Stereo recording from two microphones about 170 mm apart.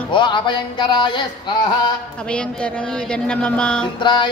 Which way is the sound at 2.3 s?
5° left (ahead or behind).